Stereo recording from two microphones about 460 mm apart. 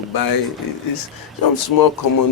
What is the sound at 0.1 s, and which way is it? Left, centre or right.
Speech, left.